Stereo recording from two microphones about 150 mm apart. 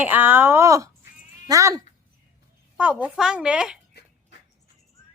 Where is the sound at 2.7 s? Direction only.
10° right (ahead or behind).